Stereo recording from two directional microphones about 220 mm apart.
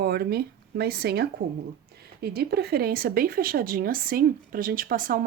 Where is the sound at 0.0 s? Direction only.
45° right (ahead or behind).